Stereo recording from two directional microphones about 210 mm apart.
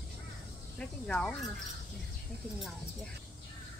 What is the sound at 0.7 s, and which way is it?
Speech, 5° left (ahead or behind).